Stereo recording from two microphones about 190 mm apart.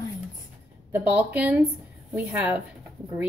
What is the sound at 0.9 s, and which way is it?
A woman's voice, 5° right (ahead or behind).